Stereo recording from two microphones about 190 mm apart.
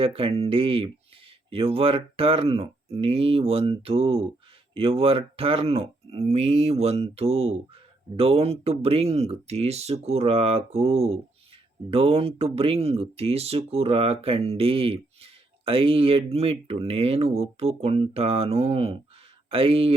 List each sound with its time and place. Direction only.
0.0 s speech: 30° right (ahead or behind)